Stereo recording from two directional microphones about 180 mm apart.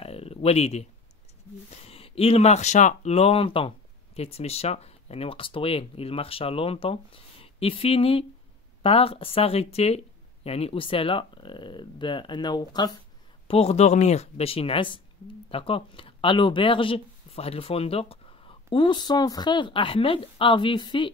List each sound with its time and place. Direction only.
0.0 s a sound: 35° left (ahead or behind)
1.7 s speech: 35° left (ahead or behind)
13.5 s speech: 35° left (ahead or behind)